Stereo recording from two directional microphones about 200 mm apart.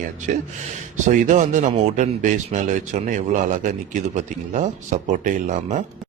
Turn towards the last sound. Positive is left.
turn(degrees=-40)  # may be behind; listen again after turning